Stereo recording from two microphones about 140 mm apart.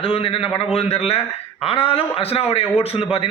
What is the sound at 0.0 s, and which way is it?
A man's voice, 40° left (ahead or behind).